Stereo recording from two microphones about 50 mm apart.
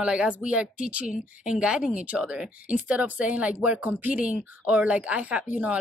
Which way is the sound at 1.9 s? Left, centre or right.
Right.